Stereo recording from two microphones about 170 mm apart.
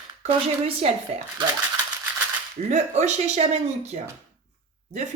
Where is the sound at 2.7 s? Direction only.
40° right (ahead or behind).